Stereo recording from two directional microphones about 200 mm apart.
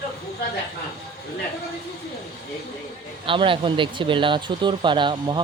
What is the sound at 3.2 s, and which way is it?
Speech, 25° right (ahead or behind).